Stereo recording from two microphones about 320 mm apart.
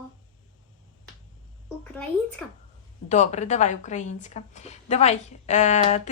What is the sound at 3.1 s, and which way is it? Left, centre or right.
A woman's voice, left.